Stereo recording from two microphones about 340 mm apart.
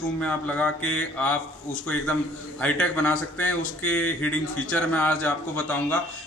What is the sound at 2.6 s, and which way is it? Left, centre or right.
Speech, centre.